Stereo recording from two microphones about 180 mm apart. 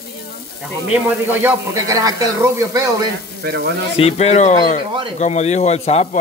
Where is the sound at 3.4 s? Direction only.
60° right (ahead or behind).